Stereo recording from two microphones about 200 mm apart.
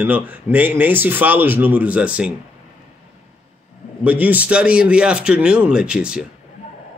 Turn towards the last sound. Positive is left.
turn(degrees=-5)  # may be behind; listen again after turning